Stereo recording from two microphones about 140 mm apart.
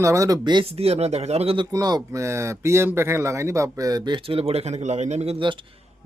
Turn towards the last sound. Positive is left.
turn(degrees=-50)  # may be behind; listen again after turning